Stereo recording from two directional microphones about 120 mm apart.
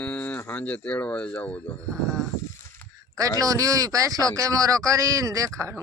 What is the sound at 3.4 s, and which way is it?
A man's voice, 30° right (ahead or behind).